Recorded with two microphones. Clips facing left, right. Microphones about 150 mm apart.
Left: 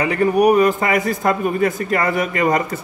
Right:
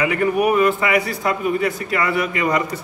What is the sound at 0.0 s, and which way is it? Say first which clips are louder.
A man's voice: left 3 dB; 35° left (ahead or behind).